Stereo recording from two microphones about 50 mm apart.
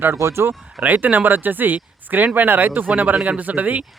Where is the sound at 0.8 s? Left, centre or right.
Right.